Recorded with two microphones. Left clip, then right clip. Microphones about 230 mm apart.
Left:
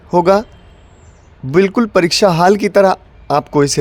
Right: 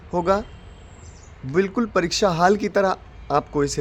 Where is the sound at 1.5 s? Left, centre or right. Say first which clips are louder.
Left 9 dB; left.